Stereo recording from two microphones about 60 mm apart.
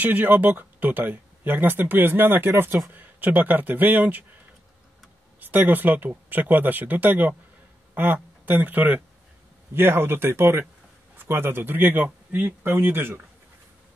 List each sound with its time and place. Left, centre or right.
0.0 s speech: right
5.4 s speech: right
9.8 s speech: right